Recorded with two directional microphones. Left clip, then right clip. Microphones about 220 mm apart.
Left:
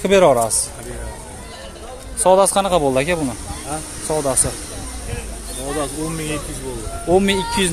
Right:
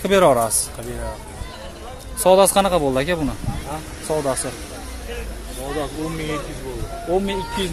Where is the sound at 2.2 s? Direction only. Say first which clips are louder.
Even; centre (ahead or behind).